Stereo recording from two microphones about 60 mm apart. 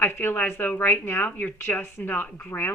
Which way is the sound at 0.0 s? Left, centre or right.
Left.